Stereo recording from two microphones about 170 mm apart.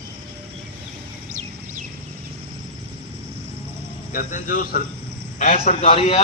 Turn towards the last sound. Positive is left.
turn(degrees=35)  # may be behind; listen again after turning